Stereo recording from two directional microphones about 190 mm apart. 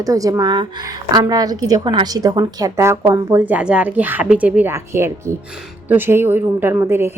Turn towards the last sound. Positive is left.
turn(degrees=-15)  # may be behind; listen again after turning